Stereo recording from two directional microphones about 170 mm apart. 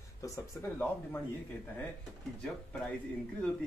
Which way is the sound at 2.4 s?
5° left (ahead or behind).